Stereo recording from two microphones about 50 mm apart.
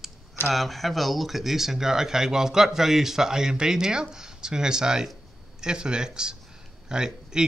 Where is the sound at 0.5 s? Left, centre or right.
Centre.